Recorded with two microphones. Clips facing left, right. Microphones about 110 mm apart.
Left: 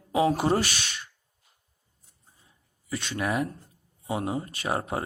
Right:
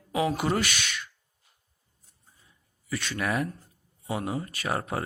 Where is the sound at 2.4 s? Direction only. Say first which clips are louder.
Even; 30° left (ahead or behind).